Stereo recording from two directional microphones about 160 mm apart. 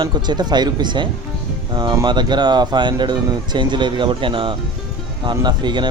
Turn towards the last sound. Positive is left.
turn(degrees=-30)  # may be behind; listen again after turning